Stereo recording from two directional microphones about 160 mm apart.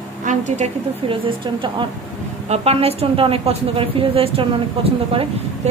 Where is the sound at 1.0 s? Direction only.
30° right (ahead or behind).